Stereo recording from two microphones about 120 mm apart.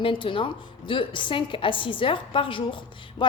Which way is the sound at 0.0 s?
45° left (ahead or behind).